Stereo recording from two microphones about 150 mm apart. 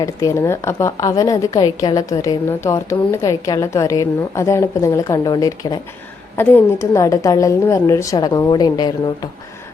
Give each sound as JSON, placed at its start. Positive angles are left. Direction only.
{"t": 0.0, "sound": "a woman's voice", "side_deg": 20}